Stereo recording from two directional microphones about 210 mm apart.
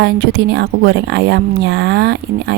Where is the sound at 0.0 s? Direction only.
50° right (ahead or behind).